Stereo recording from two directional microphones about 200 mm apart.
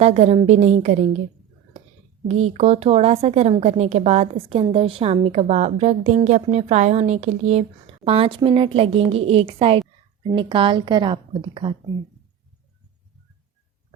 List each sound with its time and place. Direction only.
0.0 s a woman's voice: 30° right (ahead or behind)
2.2 s a woman's voice: 35° right (ahead or behind)